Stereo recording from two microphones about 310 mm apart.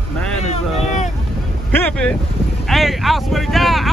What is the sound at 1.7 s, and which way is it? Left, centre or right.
Speech, centre.